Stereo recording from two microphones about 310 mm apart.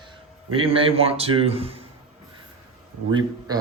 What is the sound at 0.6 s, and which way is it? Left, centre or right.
A man's voice, centre.